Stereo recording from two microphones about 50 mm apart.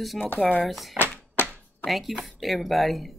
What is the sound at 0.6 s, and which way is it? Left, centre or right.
Speech, centre.